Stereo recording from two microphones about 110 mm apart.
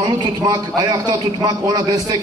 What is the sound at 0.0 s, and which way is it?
A man's voice, 40° right (ahead or behind).